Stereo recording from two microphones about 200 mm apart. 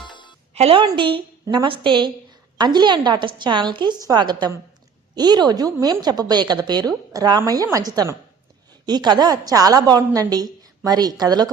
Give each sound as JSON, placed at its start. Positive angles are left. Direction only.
{"t": 0.0, "sound": "music", "side_deg": 25}
{"t": 0.5, "sound": "speech", "side_deg": -30}